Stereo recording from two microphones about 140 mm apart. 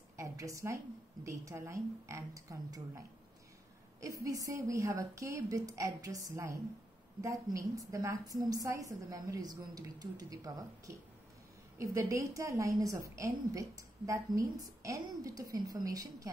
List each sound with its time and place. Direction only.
0.2 s a woman's voice: 20° right (ahead or behind)
4.0 s a woman's voice: 25° right (ahead or behind)